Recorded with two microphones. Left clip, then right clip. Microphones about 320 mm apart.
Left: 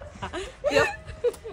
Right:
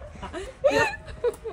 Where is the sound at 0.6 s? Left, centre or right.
Centre.